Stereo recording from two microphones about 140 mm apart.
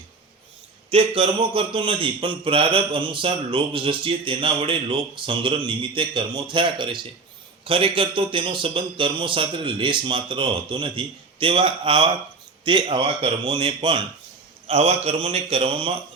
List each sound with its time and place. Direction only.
0.9 s a man's voice: 40° right (ahead or behind)
14.7 s speech: 50° right (ahead or behind)